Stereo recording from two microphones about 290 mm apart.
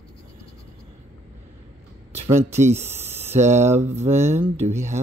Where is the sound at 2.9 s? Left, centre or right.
Centre.